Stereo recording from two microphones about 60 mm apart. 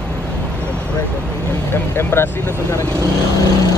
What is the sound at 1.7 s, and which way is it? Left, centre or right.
Vehicle, left.